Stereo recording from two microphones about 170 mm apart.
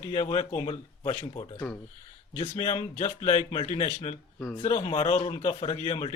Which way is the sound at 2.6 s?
40° left (ahead or behind).